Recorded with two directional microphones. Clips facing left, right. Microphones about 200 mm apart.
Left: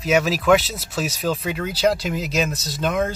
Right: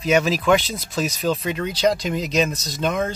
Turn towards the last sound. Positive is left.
turn(degrees=5)  # may be behind; listen again after turning